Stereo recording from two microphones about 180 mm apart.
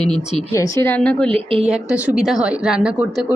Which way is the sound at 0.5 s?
15° left (ahead or behind).